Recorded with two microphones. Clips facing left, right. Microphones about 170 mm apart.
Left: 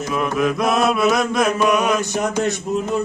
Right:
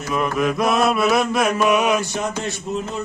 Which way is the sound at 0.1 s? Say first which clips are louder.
Even; centre (ahead or behind).